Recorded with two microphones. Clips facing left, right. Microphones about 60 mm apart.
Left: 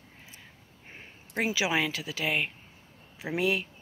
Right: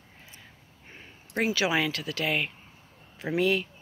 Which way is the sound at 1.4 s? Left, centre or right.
Centre.